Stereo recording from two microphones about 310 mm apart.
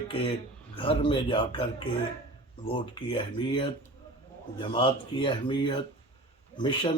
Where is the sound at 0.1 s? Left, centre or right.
Centre.